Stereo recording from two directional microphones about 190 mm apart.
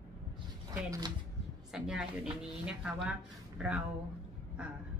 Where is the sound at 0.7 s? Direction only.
15° right (ahead or behind).